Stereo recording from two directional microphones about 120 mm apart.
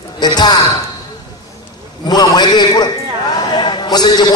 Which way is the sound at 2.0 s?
35° left (ahead or behind).